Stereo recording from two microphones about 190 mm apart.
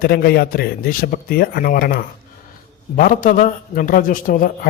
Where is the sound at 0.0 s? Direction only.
50° left (ahead or behind).